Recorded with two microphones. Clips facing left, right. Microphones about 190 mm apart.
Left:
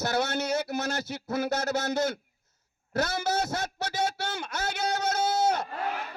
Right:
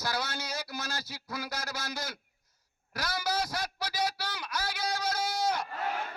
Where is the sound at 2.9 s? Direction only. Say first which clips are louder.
Left 6 dB; 25° left (ahead or behind).